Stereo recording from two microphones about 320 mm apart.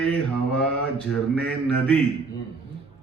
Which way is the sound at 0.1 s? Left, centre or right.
Centre.